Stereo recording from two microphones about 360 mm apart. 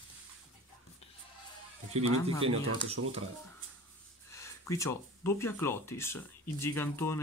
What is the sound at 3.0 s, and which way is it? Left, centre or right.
Speech, right.